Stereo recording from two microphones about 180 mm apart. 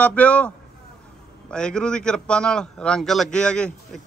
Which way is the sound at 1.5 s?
5° left (ahead or behind).